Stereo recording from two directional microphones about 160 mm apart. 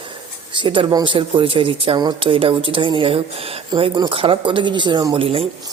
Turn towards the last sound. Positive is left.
turn(degrees=-25)  # may be behind; listen again after turning